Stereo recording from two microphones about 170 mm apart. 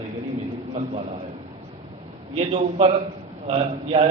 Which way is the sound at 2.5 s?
35° right (ahead or behind).